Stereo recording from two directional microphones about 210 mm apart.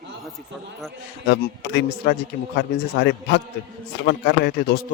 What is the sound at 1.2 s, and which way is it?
Speech, 55° left (ahead or behind).